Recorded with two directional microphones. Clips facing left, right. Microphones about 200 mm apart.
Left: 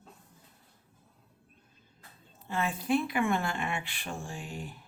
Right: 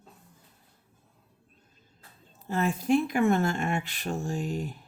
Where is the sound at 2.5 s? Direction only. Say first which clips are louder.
Right 4 dB; 40° right (ahead or behind).